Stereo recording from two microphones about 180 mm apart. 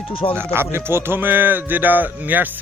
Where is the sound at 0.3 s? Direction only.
15° right (ahead or behind).